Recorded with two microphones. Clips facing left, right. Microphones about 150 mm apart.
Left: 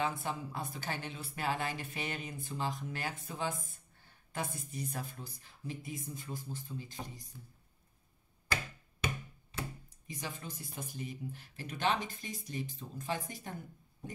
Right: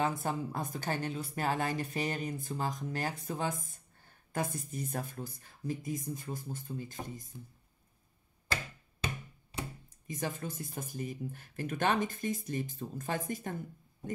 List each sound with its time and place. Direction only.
0.0 s a woman's voice: 45° right (ahead or behind)
10.0 s a woman's voice: 50° right (ahead or behind)